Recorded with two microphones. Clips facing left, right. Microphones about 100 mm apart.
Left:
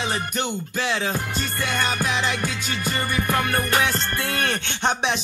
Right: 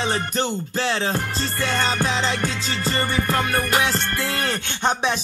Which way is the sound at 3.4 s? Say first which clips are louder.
Even; 20° right (ahead or behind).